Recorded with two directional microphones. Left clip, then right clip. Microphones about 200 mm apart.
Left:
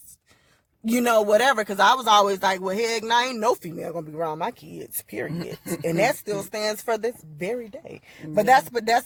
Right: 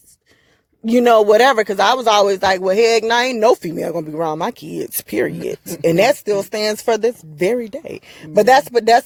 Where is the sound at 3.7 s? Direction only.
50° right (ahead or behind).